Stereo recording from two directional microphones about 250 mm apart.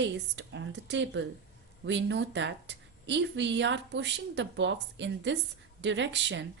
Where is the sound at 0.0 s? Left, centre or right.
Right.